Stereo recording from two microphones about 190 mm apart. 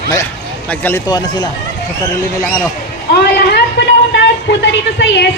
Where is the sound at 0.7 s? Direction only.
10° left (ahead or behind).